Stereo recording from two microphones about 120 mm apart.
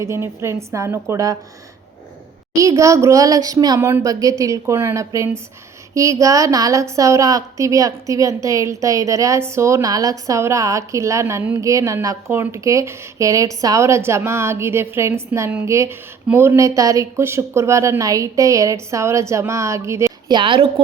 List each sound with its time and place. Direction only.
0.0 s a woman's voice: 20° right (ahead or behind)
2.6 s a woman's voice: 25° right (ahead or behind)
3.8 s a woman's voice: 20° right (ahead or behind)
20.2 s a woman's voice: 40° right (ahead or behind)